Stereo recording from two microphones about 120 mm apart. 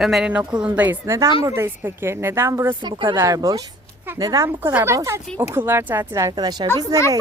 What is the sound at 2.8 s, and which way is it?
Speech, 45° right (ahead or behind).